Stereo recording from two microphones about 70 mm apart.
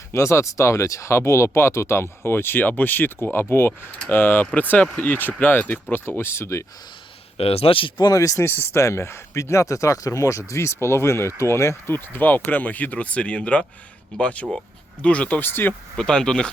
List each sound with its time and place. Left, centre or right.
0.1 s speech: left
5.9 s speech: left
7.9 s speech: left
8.2 s speech: left
8.4 s speech: left
11.9 s speech: left
15.4 s speech: left
16.0 s speech: centre